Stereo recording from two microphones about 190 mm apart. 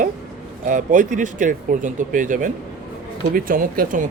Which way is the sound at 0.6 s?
45° right (ahead or behind).